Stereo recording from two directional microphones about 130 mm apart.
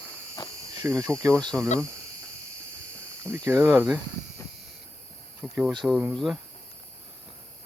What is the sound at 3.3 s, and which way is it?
Speech, 20° right (ahead or behind).